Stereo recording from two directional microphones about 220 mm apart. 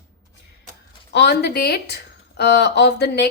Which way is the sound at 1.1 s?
50° left (ahead or behind).